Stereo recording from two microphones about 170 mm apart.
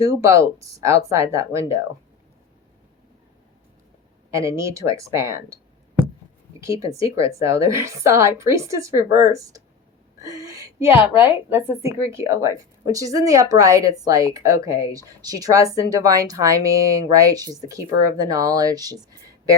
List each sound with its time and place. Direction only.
0.0 s speech: 20° right (ahead or behind)
4.3 s speech: 20° right (ahead or behind)
6.6 s speech: 20° right (ahead or behind)
10.2 s a sound: 20° right (ahead or behind)
10.9 s speech: 15° right (ahead or behind)